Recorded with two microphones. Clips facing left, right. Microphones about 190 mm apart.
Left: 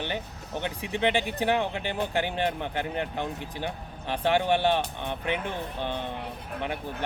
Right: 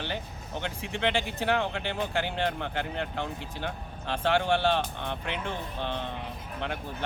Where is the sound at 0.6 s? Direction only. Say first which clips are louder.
Left 3 dB; 15° left (ahead or behind).